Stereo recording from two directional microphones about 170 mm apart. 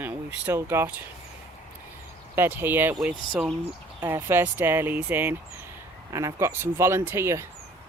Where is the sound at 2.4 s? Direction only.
10° right (ahead or behind).